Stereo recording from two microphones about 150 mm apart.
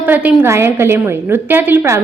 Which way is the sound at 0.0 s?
10° right (ahead or behind).